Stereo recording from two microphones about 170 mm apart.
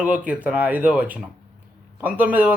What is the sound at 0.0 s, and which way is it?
A man's voice, 10° right (ahead or behind).